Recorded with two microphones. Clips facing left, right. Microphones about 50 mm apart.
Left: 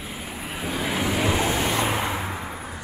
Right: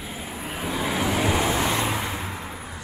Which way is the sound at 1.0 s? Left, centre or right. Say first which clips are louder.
Even; centre.